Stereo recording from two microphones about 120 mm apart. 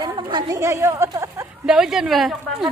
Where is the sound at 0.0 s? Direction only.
35° right (ahead or behind).